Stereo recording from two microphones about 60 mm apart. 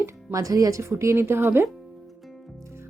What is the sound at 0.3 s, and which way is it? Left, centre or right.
Speech, right.